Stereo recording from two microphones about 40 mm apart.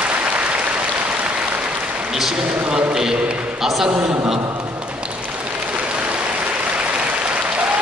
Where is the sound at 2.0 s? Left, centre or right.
Centre.